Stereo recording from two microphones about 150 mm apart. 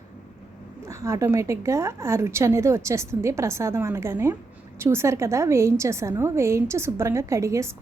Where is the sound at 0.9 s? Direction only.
20° right (ahead or behind).